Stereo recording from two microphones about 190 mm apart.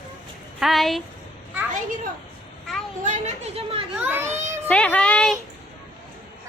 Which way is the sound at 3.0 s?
35° right (ahead or behind).